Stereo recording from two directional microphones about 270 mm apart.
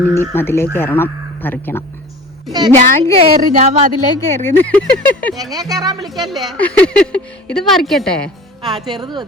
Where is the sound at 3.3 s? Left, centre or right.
Right.